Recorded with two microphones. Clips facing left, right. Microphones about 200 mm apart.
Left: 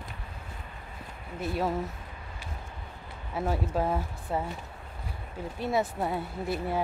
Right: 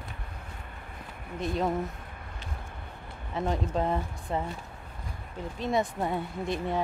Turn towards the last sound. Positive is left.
turn(degrees=5)  # may be behind; listen again after turning